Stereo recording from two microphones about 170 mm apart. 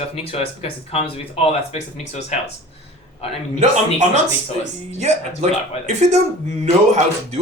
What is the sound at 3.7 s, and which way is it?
Speech, 45° right (ahead or behind).